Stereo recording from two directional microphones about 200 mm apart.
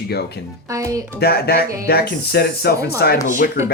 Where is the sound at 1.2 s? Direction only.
50° left (ahead or behind).